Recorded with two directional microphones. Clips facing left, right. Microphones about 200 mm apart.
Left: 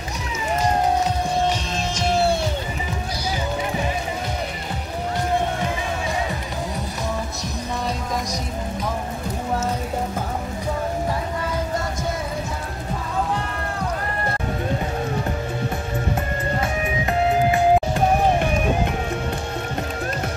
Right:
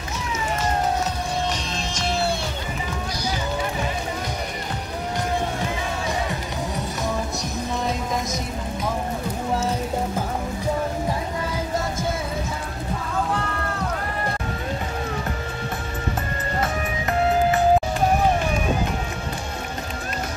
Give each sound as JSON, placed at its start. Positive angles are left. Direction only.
{"t": 17.0, "sound": "music", "side_deg": 15}